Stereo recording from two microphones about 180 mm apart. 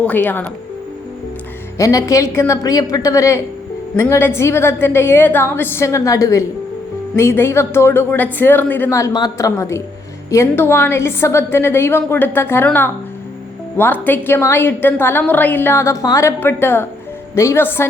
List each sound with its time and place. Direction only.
0.0 s a woman's voice: 10° left (ahead or behind)
1.8 s a woman's voice: 20° left (ahead or behind)